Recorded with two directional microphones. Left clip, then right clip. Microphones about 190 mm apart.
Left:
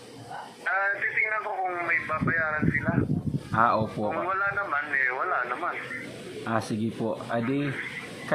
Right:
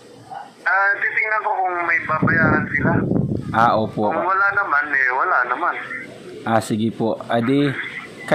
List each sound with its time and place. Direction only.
0.7 s speech: 45° right (ahead or behind)
3.5 s speech: 30° right (ahead or behind)
4.1 s speech: 40° right (ahead or behind)
6.4 s speech: 30° right (ahead or behind)